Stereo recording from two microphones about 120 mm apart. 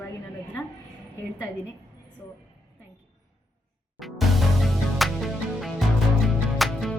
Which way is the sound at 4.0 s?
Centre (ahead or behind).